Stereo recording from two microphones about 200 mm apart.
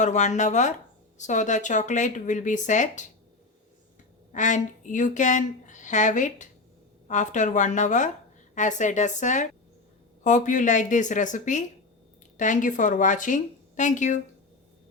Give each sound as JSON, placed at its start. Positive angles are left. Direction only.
{"t": 0.0, "sound": "speech", "side_deg": 35}
{"t": 4.3, "sound": "speech", "side_deg": 40}